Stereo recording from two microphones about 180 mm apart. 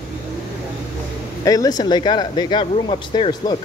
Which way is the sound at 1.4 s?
20° left (ahead or behind).